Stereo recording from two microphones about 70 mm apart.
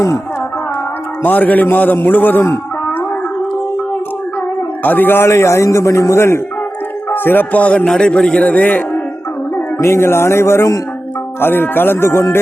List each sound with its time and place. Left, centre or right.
1.2 s a man's voice: left
4.8 s a man's voice: left
7.1 s a man's voice: left
9.7 s a man's voice: left
11.3 s a man's voice: left